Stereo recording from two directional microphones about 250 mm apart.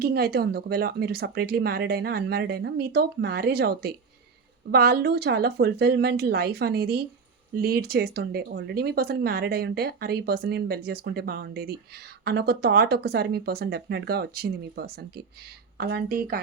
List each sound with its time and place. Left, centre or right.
0.0 s speech: right